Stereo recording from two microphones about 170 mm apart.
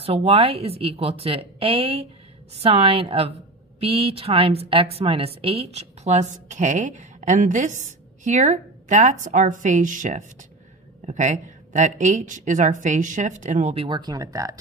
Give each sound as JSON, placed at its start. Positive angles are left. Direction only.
{"t": 0.0, "sound": "a woman's voice", "side_deg": -35}
{"t": 13.8, "sound": "speech", "side_deg": -25}